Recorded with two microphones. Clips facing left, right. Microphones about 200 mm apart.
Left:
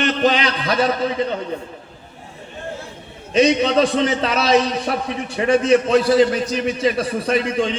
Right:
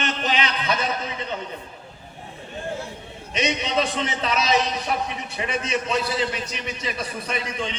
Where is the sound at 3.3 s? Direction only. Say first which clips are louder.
Left 9 dB; 35° left (ahead or behind).